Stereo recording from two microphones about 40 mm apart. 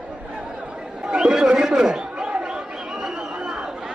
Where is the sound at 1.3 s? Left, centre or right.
Centre.